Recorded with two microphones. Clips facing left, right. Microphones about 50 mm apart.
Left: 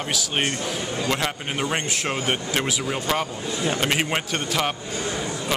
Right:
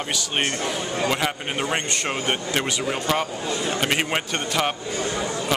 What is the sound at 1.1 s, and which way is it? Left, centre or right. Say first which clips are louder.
A man's voice: right 1 dB; centre.